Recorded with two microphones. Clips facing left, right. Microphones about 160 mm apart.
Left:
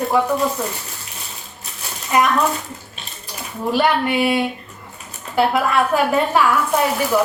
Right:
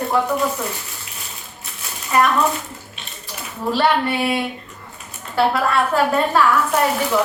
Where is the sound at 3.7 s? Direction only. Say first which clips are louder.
Even; 15° left (ahead or behind).